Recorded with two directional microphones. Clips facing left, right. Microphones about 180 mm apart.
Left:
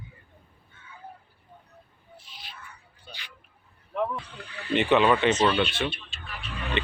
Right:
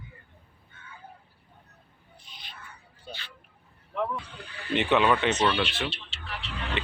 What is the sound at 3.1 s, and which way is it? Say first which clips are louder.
Vehicle: right 5 dB; 35° right (ahead or behind).